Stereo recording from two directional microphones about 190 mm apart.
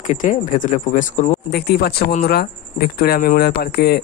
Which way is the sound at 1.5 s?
55° left (ahead or behind).